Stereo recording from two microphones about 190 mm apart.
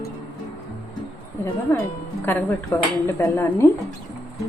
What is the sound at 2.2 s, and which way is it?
A woman's voice, 15° left (ahead or behind).